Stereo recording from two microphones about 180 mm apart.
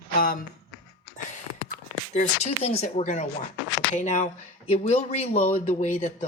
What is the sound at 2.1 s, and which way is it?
Speech, 35° left (ahead or behind).